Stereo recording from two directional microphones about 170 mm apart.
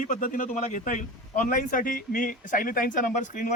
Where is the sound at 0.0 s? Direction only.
55° left (ahead or behind).